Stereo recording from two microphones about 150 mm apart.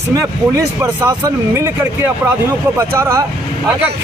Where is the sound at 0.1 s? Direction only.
20° right (ahead or behind).